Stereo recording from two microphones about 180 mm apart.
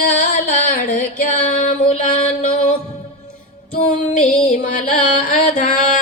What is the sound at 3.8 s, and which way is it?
Music, 45° left (ahead or behind).